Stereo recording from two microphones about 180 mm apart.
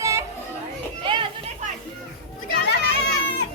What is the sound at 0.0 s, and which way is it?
Children playing, 15° right (ahead or behind).